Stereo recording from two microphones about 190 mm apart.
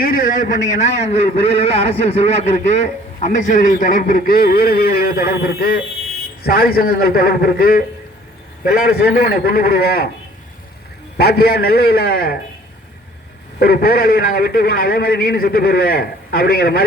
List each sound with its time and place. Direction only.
0.0 s a man's voice: 50° left (ahead or behind)
9.3 s a man's voice: 50° left (ahead or behind)
11.2 s a man's voice: 55° left (ahead or behind)
13.6 s a man's voice: 55° left (ahead or behind)